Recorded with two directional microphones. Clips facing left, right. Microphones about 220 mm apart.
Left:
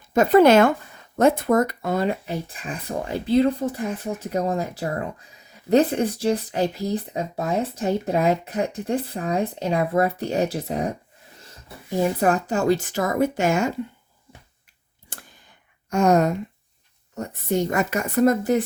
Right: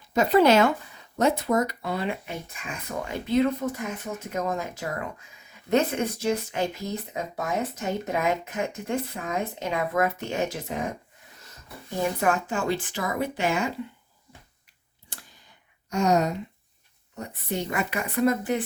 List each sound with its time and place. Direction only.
0.1 s speech: 50° left (ahead or behind)
11.3 s a sound: 30° left (ahead or behind)
12.2 s speech: 40° left (ahead or behind)
15.1 s clicking: 50° left (ahead or behind)
15.9 s speech: 50° left (ahead or behind)